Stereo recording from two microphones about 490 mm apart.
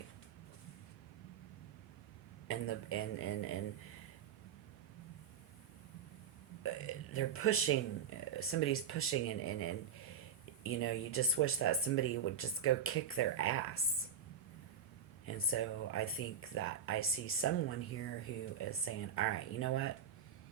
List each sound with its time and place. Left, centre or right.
2.5 s speech: left
6.6 s burping: left
8.4 s speech: left
15.3 s speech: left